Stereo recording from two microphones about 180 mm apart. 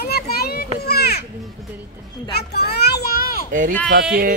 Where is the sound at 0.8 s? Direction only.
60° left (ahead or behind).